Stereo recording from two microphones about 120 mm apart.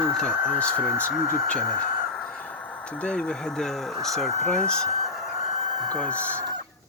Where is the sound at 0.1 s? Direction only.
5° left (ahead or behind).